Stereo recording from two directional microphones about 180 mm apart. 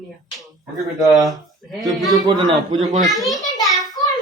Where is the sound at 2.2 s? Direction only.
25° right (ahead or behind).